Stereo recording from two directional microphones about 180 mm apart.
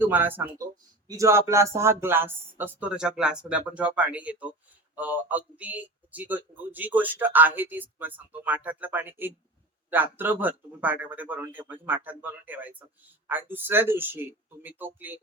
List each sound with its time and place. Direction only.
0.0 s speech: 10° right (ahead or behind)